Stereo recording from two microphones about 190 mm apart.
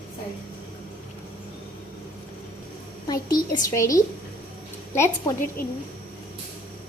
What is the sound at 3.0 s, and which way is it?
A woman's voice, 20° left (ahead or behind).